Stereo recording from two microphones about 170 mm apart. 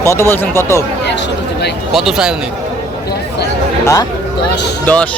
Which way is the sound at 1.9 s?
Centre (ahead or behind).